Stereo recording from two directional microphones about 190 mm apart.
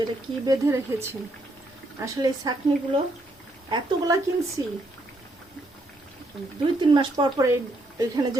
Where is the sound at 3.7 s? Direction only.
20° right (ahead or behind).